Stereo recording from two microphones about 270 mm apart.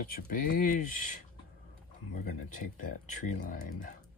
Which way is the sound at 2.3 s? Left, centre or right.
Left.